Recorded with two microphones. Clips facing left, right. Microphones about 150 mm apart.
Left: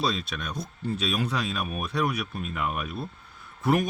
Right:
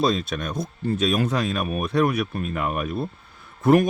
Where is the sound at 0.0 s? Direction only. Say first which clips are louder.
Right 6 dB; 45° right (ahead or behind).